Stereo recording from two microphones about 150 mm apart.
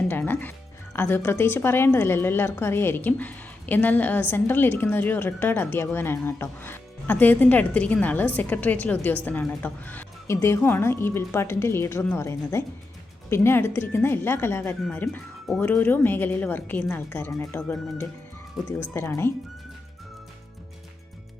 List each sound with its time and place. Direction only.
0.1 s music: 15° left (ahead or behind)
0.9 s a woman's voice: 15° left (ahead or behind)